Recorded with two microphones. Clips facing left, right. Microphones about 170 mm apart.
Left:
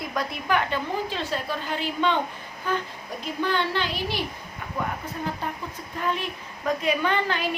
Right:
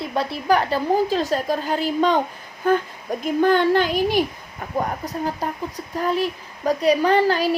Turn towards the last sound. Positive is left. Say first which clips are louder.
# right 8 dB
turn(degrees=-35)  # may be behind; listen again after turning